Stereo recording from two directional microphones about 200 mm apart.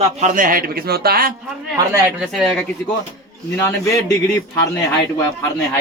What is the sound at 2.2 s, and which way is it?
Speech, centre (ahead or behind).